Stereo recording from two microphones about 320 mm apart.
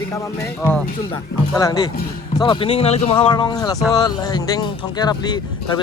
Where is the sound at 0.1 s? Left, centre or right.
Centre.